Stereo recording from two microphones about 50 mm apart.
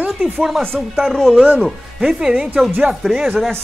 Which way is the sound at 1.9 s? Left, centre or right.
Centre.